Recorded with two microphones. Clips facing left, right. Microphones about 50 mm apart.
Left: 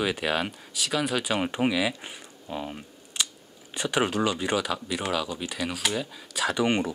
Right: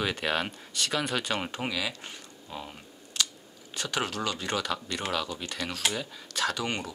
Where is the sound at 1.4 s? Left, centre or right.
Centre.